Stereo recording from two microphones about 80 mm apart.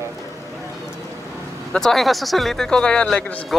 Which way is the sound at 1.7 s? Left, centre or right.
Centre.